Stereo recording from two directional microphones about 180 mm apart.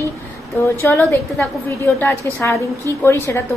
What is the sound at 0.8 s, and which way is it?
A woman's voice, 10° left (ahead or behind).